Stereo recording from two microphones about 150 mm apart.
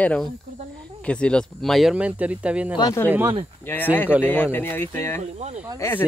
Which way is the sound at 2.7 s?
25° left (ahead or behind).